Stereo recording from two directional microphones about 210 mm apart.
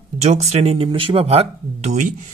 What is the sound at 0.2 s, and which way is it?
Speech, 30° right (ahead or behind).